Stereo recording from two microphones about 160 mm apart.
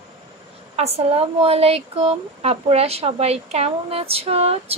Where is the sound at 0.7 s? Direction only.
40° right (ahead or behind).